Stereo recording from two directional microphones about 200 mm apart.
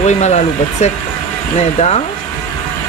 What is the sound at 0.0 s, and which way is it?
Speech, 35° left (ahead or behind).